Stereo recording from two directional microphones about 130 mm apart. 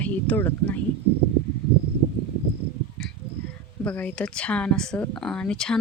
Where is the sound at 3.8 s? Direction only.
10° left (ahead or behind).